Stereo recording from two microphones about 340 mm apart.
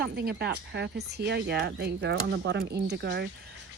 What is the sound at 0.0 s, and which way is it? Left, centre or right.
Speech, right.